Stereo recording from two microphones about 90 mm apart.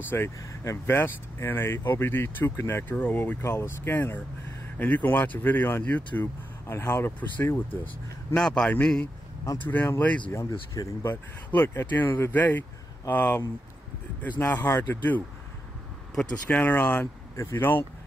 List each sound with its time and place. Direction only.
0.1 s speech: 30° left (ahead or behind)
3.4 s speech: 30° left (ahead or behind)
6.7 s speech: 30° left (ahead or behind)
8.4 s speech: 5° left (ahead or behind)
10.7 s speech: 35° left (ahead or behind); by 17.1 s 20° left (ahead or behind)
17.4 s speech: 30° left (ahead or behind)